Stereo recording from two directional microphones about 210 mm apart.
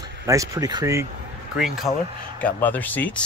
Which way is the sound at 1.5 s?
5° right (ahead or behind).